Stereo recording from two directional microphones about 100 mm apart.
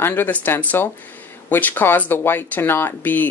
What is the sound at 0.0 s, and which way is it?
Speech, 20° left (ahead or behind).